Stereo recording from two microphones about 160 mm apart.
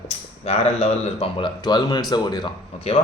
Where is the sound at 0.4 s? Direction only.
40° left (ahead or behind); by 2.5 s 25° left (ahead or behind).